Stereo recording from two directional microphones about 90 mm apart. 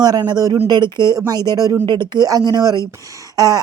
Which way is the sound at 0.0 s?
50° right (ahead or behind).